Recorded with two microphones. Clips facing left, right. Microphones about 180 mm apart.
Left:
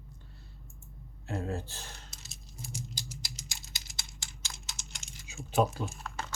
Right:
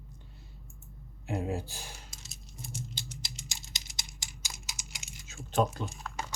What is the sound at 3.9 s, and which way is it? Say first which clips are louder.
Computer keyboard: right 1 dB; 20° right (ahead or behind).